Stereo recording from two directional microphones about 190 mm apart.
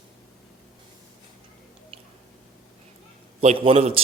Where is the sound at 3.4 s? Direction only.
35° right (ahead or behind).